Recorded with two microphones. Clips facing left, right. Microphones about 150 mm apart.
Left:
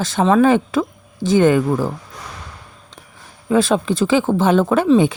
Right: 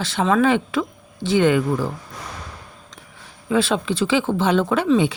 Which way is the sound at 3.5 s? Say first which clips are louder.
Left 4 dB; 45° left (ahead or behind).